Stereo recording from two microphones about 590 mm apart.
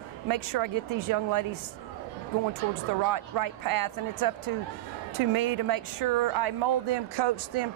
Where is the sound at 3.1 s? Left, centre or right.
Right.